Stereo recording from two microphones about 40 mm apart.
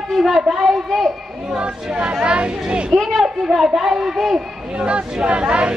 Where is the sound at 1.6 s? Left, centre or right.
Right.